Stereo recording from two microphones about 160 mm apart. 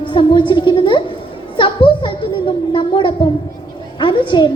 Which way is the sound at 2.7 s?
30° left (ahead or behind).